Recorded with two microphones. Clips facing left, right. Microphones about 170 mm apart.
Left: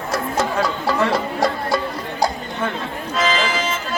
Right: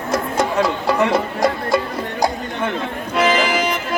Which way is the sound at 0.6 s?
20° right (ahead or behind).